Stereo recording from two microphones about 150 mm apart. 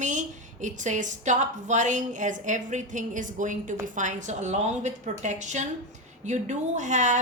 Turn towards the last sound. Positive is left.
turn(degrees=-55)  # may be behind; listen again after turning